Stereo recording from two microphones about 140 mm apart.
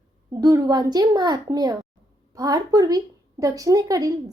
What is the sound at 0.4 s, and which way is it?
Speech, 30° right (ahead or behind).